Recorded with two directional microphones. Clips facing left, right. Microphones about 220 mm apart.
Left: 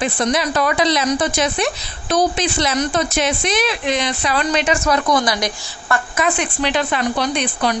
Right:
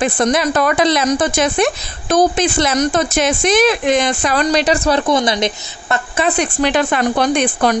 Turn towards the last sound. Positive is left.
turn(degrees=-50)  # may be behind; listen again after turning